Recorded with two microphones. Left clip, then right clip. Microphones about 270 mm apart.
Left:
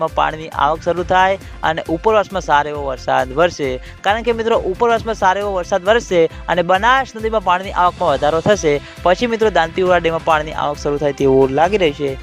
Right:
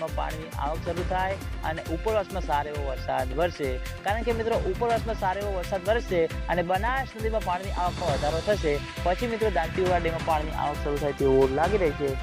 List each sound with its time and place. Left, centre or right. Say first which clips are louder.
0.0 s speech: left 14 dB; left